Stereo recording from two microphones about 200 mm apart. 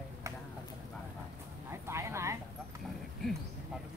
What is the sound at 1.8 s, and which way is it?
Speech, 15° right (ahead or behind).